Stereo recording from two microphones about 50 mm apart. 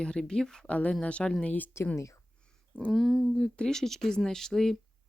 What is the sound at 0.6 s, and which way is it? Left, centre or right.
Speech, left.